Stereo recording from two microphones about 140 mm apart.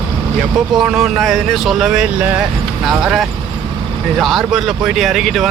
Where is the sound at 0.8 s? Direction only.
5° right (ahead or behind).